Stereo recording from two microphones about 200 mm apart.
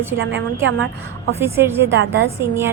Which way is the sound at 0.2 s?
75° right (ahead or behind).